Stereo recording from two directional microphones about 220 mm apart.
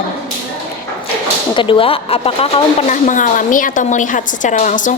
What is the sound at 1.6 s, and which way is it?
A woman's voice, 25° left (ahead or behind).